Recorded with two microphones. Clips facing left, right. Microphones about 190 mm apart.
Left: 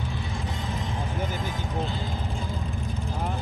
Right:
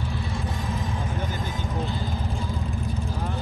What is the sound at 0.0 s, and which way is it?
Music, 15° left (ahead or behind).